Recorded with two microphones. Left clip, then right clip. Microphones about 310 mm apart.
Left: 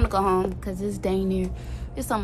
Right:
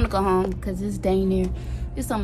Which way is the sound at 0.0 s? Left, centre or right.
Centre.